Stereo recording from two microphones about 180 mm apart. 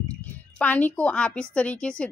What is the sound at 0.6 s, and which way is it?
A woman's voice, 10° left (ahead or behind).